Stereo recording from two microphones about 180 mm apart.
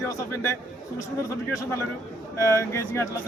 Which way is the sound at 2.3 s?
15° left (ahead or behind).